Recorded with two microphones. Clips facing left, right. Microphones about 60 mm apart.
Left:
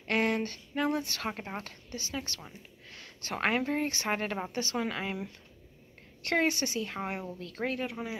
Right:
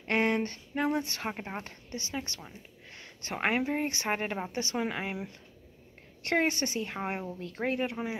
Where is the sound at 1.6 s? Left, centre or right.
Right.